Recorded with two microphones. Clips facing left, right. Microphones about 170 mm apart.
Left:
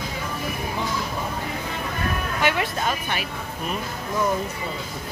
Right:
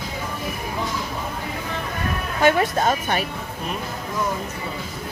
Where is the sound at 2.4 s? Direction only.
45° right (ahead or behind).